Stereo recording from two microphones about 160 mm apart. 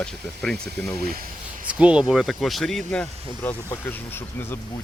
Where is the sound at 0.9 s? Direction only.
70° right (ahead or behind).